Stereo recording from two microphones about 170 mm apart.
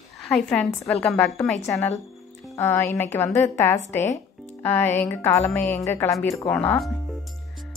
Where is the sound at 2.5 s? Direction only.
15° left (ahead or behind).